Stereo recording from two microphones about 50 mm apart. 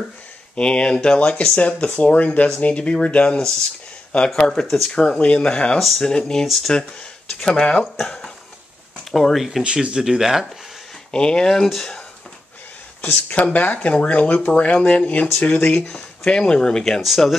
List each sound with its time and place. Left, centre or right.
0.6 s speech: centre
4.3 s speech: centre
6.4 s speech: centre
6.7 s speech: centre
9.1 s speech: centre
9.6 s speech: centre
11.1 s speech: centre
13.0 s speech: left
15.5 s speech: left
15.9 s speech: centre
17.0 s speech: centre